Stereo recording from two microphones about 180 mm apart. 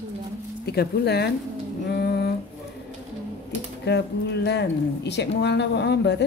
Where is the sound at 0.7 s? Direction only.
65° left (ahead or behind).